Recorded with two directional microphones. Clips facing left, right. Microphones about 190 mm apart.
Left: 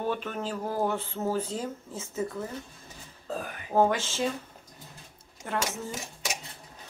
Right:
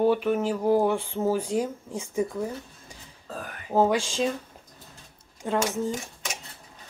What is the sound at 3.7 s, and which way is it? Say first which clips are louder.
Speech: right 2 dB; 10° right (ahead or behind).